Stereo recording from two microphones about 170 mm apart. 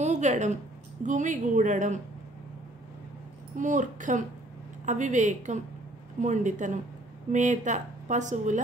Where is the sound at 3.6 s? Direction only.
50° right (ahead or behind).